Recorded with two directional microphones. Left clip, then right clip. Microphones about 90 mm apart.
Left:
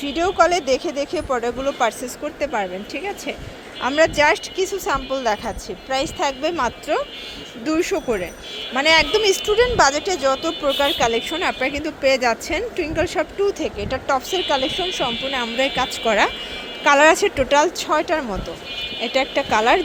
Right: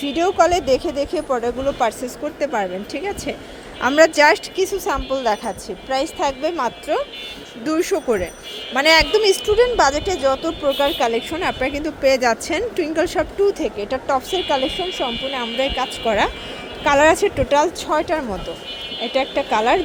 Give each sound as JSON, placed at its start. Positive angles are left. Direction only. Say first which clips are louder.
{"t": 0.0, "sound": "a woman's voice", "louder": "right 1 dB", "side_deg": -30}
{"t": 3.8, "sound": "speech", "louder": "right 3 dB", "side_deg": -45}
{"t": 4.5, "sound": "a woman's voice", "louder": "right 1 dB", "side_deg": -30}
{"t": 7.6, "sound": "speech", "louder": "right 1 dB", "side_deg": -35}
{"t": 9.1, "sound": "a woman's voice", "louder": "right 2 dB", "side_deg": -20}